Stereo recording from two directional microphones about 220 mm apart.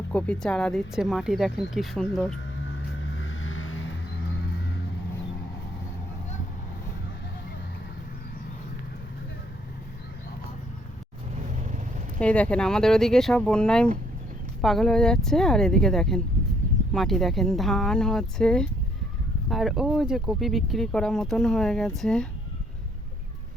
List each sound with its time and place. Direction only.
0.1 s speech: 5° left (ahead or behind)
2.6 s vehicle: 60° left (ahead or behind)
11.3 s vehicle: 30° right (ahead or behind)
12.2 s speech: 5° left (ahead or behind)